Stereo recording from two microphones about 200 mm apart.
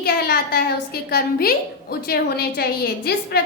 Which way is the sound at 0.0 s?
50° left (ahead or behind).